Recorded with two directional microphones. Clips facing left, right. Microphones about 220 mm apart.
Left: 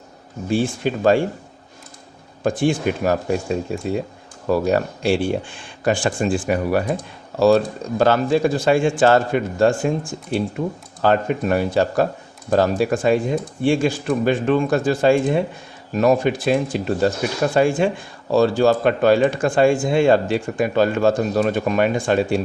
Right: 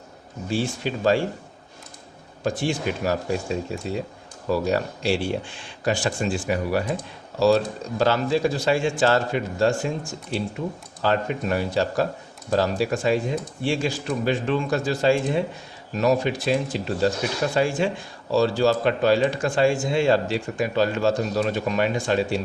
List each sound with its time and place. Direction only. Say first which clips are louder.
0.5 s speech: left 5 dB; 55° left (ahead or behind)
2.4 s speech: left 6 dB; 50° left (ahead or behind)